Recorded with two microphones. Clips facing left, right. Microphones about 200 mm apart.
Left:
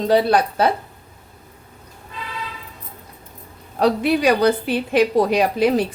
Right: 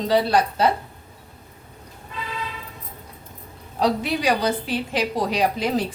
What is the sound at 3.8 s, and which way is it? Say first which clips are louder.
A woman's voice: left 5 dB; 60° left (ahead or behind).